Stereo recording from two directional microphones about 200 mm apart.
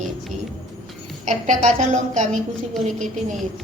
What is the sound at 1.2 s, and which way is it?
A woman's voice, 40° right (ahead or behind).